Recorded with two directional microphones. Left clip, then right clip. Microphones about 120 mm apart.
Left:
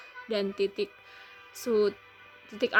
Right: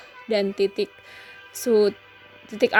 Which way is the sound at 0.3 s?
30° right (ahead or behind).